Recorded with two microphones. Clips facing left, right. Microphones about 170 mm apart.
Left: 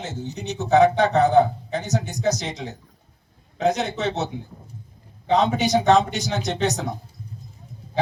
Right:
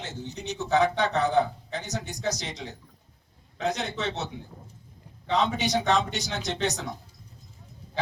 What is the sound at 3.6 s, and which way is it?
Speech, 45° left (ahead or behind).